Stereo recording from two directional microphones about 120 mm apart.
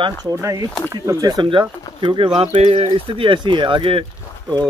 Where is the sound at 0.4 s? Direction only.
30° right (ahead or behind); by 4.0 s 45° right (ahead or behind).